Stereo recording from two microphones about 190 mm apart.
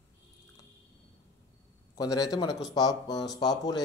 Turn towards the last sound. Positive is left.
turn(degrees=20)  # may be behind; listen again after turning